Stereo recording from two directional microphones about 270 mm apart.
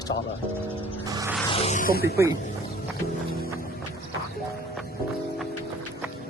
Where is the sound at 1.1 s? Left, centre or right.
Centre.